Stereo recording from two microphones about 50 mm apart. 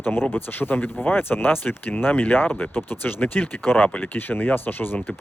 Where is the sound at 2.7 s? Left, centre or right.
Left.